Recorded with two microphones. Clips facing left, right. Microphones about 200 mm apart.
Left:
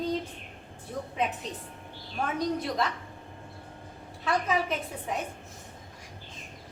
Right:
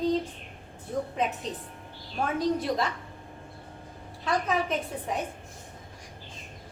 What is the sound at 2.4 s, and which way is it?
Speech, centre (ahead or behind).